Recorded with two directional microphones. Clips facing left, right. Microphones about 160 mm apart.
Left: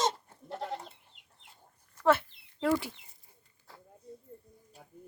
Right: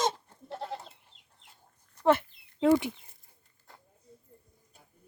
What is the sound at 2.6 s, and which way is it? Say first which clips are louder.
Speech: right 6 dB; 20° right (ahead or behind).